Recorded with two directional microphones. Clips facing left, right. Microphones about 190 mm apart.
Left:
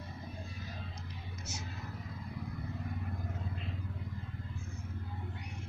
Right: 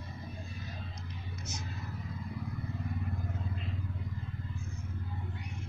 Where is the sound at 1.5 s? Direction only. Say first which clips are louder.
Right 1 dB; 10° left (ahead or behind).